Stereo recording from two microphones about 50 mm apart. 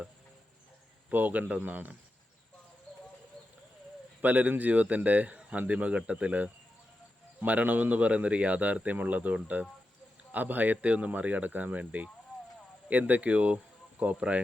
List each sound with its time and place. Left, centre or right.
1.1 s speech: right
4.2 s speech: right